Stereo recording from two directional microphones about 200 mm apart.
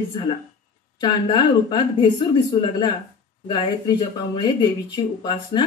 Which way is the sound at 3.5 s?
25° left (ahead or behind).